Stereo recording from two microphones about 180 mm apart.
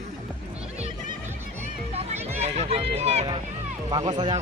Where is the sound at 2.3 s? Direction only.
35° right (ahead or behind).